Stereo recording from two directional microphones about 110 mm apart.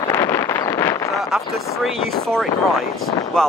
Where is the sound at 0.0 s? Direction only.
30° left (ahead or behind).